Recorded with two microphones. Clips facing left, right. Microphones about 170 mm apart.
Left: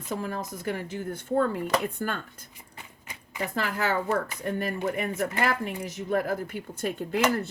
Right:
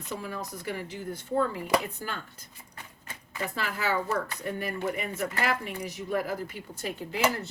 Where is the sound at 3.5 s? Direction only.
50° left (ahead or behind).